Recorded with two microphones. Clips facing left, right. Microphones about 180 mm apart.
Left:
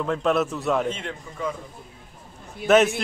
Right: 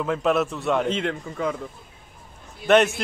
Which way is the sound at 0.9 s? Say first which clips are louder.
Right 7 dB; 60° right (ahead or behind).